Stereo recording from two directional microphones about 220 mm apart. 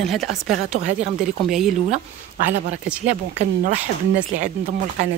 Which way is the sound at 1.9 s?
30° right (ahead or behind).